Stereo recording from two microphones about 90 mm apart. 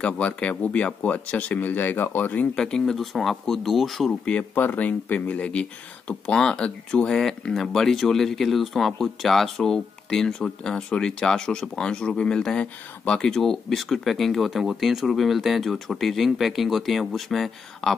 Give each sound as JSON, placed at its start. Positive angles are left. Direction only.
{"t": 0.0, "sound": "speech", "side_deg": 15}
{"t": 2.5, "sound": "speech", "side_deg": 5}
{"t": 4.2, "sound": "speech", "side_deg": 15}